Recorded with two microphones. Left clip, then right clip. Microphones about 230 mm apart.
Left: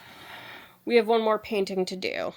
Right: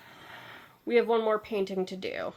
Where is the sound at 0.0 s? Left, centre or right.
Left.